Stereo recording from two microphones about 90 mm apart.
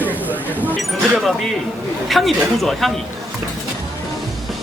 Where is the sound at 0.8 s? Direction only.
Centre (ahead or behind).